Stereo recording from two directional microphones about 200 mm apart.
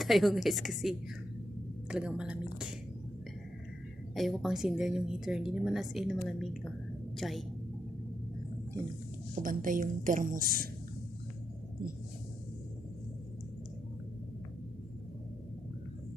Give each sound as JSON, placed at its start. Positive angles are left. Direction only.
{"t": 0.0, "sound": "a woman's voice", "side_deg": 0}
{"t": 1.9, "sound": "a sound", "side_deg": -5}
{"t": 4.1, "sound": "a woman's voice", "side_deg": 0}
{"t": 9.4, "sound": "a woman's voice", "side_deg": -45}